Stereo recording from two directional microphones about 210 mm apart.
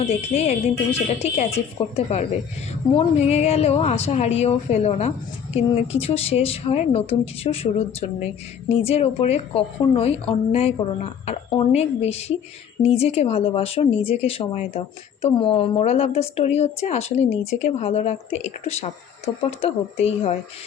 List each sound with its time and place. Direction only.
0.0 s speech: 30° left (ahead or behind)